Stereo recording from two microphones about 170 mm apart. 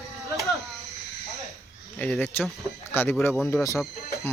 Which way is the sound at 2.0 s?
10° left (ahead or behind).